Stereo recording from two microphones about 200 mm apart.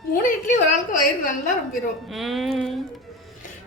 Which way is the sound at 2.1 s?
Centre (ahead or behind).